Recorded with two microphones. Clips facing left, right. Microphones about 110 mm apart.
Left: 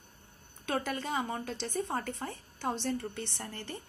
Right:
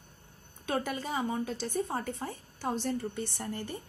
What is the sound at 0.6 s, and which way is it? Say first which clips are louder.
Speech: right 1 dB; 10° right (ahead or behind).